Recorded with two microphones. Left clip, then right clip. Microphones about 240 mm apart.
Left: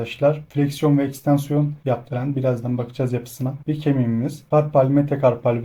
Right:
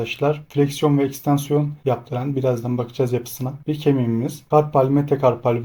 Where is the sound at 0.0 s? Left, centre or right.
Right.